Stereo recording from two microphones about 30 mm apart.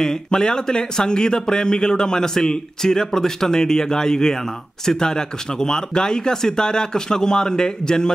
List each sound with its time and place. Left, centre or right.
0.0 s speech: left